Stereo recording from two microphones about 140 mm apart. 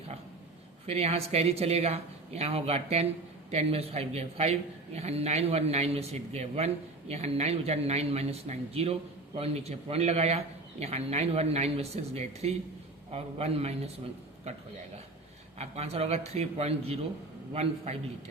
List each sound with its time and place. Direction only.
0.9 s speech: 45° right (ahead or behind)
15.5 s speech: 50° right (ahead or behind)